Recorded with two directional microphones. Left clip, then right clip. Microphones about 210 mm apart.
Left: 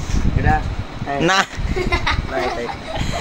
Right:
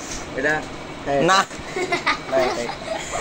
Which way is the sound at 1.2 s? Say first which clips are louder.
Even; 30° left (ahead or behind).